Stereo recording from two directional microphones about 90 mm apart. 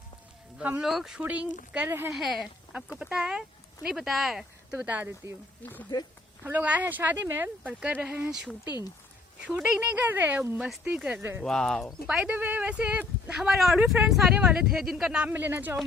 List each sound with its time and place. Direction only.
0.8 s speech: 5° right (ahead or behind)
1.2 s speech: 15° right (ahead or behind)
2.1 s speech: centre (ahead or behind); by 5.1 s 20° right (ahead or behind)
5.6 s speech: 20° left (ahead or behind)
6.4 s speech: 15° right (ahead or behind)
9.6 s speech: 10° right (ahead or behind); by 11.4 s 25° right (ahead or behind)
11.4 s speech: 5° left (ahead or behind)
12.0 s speech: 15° right (ahead or behind)
15.3 s speech: 25° right (ahead or behind)